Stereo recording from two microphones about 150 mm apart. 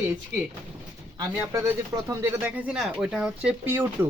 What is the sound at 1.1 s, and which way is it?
Speech, 20° right (ahead or behind).